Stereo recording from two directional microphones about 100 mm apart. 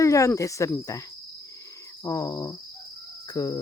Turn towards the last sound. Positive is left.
turn(degrees=40)  # may be behind; listen again after turning